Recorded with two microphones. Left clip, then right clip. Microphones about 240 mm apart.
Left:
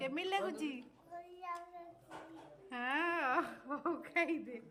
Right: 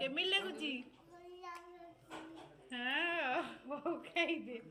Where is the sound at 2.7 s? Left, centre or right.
Centre.